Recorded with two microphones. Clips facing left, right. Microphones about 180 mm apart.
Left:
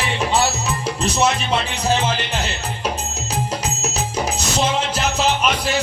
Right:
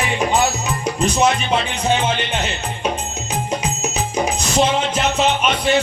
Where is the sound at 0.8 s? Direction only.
10° right (ahead or behind).